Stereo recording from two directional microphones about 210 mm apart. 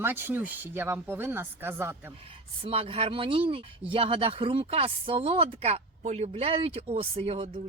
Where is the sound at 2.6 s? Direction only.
25° right (ahead or behind).